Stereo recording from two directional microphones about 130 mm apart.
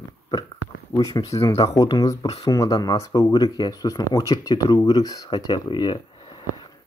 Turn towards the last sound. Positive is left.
turn(degrees=40)  # may be behind; listen again after turning